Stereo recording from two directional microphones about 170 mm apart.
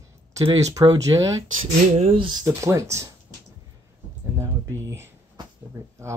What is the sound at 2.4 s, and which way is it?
Speech, 15° right (ahead or behind).